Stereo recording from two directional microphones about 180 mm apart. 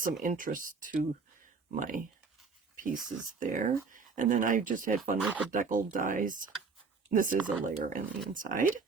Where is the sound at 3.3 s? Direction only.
45° right (ahead or behind).